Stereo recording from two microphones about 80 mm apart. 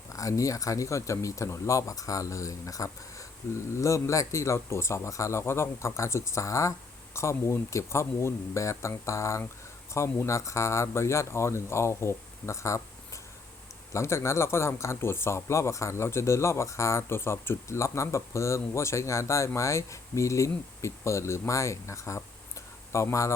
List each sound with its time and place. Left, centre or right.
0.1 s speech: left
13.9 s speech: left